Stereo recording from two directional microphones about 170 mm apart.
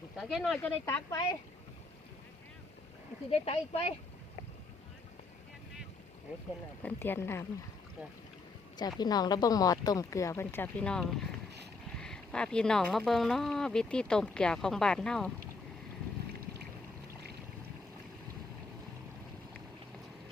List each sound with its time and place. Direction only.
0.2 s speech: centre (ahead or behind)
3.2 s speech: 35° left (ahead or behind)
6.8 s speech: 10° left (ahead or behind)
8.8 s speech: 25° left (ahead or behind); by 15.3 s 5° left (ahead or behind)